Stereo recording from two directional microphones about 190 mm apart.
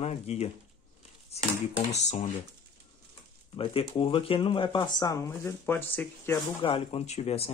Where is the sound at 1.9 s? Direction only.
35° left (ahead or behind).